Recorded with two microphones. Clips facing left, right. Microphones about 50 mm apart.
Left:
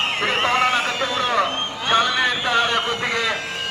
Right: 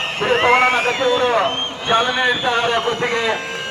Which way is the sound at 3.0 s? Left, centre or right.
Right.